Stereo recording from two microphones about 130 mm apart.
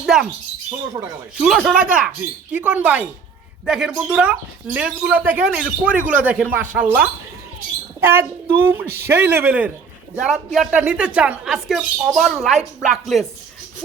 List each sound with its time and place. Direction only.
0.0 s a woman's voice: 5° right (ahead or behind)